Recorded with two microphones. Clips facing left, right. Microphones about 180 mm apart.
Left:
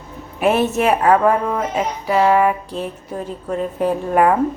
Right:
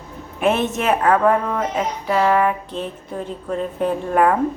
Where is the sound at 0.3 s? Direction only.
5° left (ahead or behind).